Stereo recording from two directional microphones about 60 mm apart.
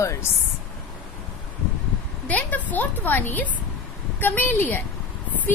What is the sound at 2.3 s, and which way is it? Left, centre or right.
A woman's voice, left.